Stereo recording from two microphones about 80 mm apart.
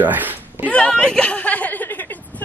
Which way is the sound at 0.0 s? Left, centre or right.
Right.